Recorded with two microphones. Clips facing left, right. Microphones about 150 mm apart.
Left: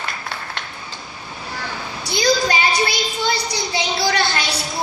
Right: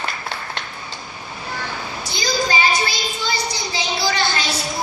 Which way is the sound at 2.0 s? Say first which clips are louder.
Left 5 dB; 65° left (ahead or behind).